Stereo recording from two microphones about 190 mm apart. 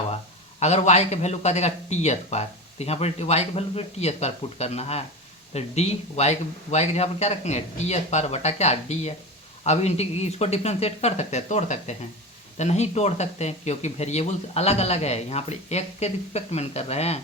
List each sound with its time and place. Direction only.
0.6 s speech: 35° left (ahead or behind)